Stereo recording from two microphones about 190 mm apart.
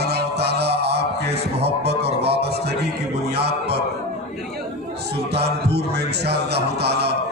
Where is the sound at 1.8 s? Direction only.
60° right (ahead or behind).